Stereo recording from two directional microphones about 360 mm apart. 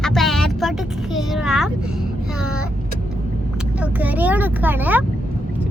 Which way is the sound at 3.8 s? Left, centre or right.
Centre.